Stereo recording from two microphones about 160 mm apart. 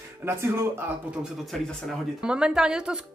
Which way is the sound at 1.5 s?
Centre (ahead or behind).